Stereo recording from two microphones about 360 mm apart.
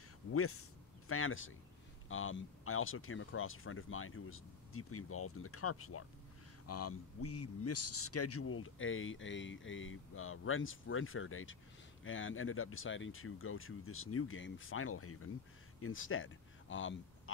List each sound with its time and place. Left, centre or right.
0.3 s a man's voice: left